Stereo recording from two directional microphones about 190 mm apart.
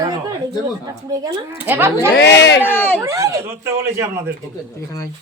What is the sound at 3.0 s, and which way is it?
A woman's voice, 15° right (ahead or behind).